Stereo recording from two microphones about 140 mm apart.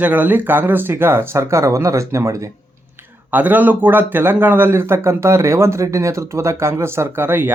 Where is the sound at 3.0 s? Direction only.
10° right (ahead or behind).